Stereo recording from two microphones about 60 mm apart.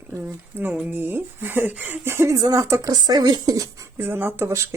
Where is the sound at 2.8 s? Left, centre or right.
Right.